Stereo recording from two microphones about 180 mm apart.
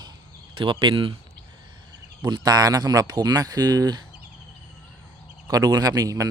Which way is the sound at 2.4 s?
20° right (ahead or behind).